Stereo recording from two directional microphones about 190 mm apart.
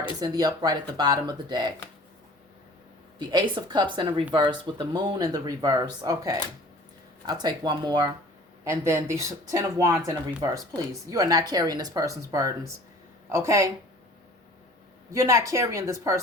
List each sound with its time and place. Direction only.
0.2 s speech: 20° right (ahead or behind)
3.2 s speech: 25° right (ahead or behind)
11.0 s speech: 15° right (ahead or behind)
15.1 s speech: 15° right (ahead or behind)